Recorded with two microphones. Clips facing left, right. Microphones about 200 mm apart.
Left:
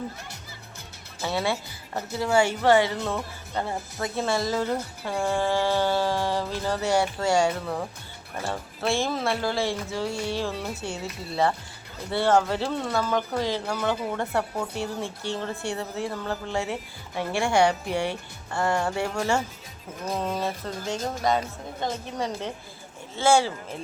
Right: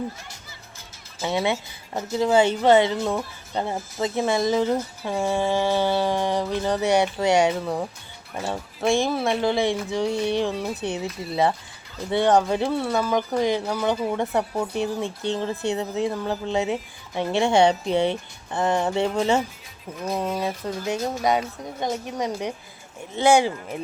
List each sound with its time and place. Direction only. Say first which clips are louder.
1.2 s speech: right 3 dB; 20° right (ahead or behind)
20.1 s speech: right 2 dB; 5° right (ahead or behind)
21.2 s speech: right 1 dB; 15° right (ahead or behind)